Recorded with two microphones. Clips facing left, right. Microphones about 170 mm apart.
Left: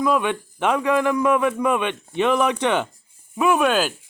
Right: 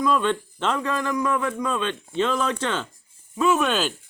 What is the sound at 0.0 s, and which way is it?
Speech, 15° left (ahead or behind).